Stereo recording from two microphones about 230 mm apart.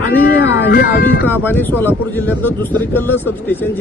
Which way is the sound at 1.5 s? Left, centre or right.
Centre.